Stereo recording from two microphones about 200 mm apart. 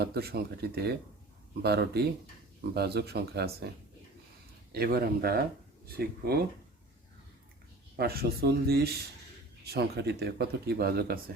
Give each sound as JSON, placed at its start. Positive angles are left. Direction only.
{"t": 0.0, "sound": "speech", "side_deg": -50}
{"t": 4.7, "sound": "speech", "side_deg": -50}
{"t": 7.9, "sound": "speech", "side_deg": -50}